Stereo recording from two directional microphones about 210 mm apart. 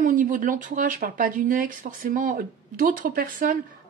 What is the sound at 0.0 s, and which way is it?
Speech, 40° right (ahead or behind).